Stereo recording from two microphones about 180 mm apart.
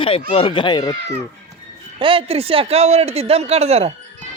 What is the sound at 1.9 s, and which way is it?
A man's voice, 30° right (ahead or behind).